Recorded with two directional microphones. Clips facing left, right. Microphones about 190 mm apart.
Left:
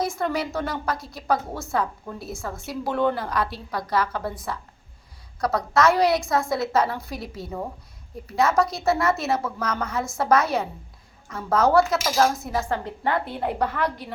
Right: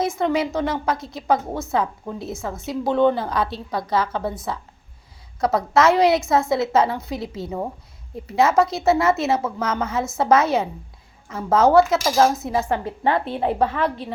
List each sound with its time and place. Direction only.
0.0 s a woman's voice: 20° right (ahead or behind)